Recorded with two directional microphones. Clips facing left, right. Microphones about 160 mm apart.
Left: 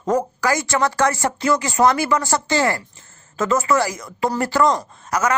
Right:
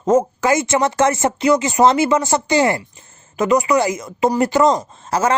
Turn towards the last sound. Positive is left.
turn(degrees=-30)  # may be behind; listen again after turning